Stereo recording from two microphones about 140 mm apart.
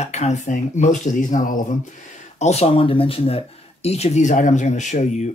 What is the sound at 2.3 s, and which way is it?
Speech, 50° left (ahead or behind).